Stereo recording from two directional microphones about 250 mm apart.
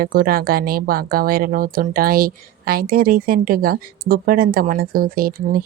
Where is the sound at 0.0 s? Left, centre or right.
Right.